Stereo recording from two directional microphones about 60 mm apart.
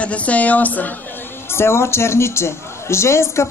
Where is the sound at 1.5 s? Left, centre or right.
Left.